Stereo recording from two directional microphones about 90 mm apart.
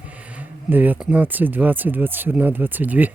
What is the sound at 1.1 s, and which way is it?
Speech, 20° right (ahead or behind).